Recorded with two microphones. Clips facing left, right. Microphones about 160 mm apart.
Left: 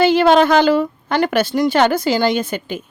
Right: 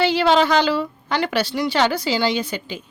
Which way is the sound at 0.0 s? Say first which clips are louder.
Left 5 dB; 50° left (ahead or behind).